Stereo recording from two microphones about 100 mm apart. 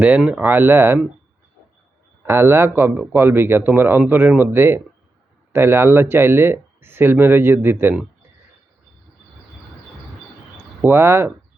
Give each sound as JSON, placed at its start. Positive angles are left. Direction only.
{"t": 0.0, "sound": "speech", "side_deg": -15}
{"t": 2.2, "sound": "speech", "side_deg": -25}
{"t": 10.8, "sound": "speech", "side_deg": -25}